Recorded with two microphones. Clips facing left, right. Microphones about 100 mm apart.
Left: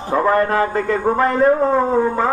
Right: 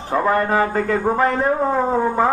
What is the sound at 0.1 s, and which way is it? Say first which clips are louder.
A man's voice: left 2 dB; centre (ahead or behind).